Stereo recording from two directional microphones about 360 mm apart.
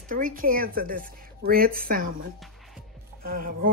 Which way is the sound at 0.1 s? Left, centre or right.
Right.